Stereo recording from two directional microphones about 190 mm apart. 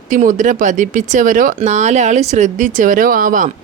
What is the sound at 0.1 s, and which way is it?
Speech, 40° right (ahead or behind).